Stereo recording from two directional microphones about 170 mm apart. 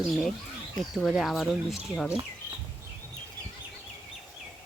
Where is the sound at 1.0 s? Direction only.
Centre (ahead or behind).